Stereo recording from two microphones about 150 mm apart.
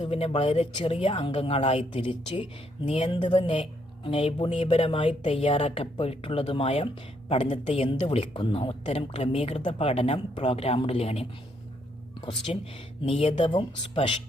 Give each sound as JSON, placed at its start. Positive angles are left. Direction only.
{"t": 0.0, "sound": "speech", "side_deg": 40}
{"t": 12.5, "sound": "speech", "side_deg": 40}